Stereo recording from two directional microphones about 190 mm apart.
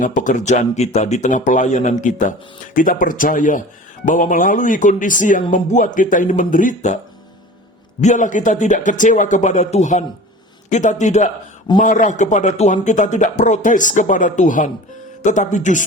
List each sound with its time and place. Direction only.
0.0 s a man's voice: 45° left (ahead or behind)
8.0 s a man's voice: 40° left (ahead or behind)